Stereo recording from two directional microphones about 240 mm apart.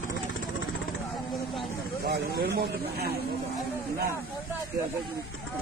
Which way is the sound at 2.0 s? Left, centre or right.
Right.